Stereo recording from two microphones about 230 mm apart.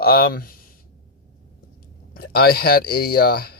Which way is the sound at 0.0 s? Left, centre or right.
Left.